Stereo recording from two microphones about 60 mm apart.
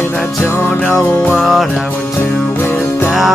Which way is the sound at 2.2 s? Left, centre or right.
Left.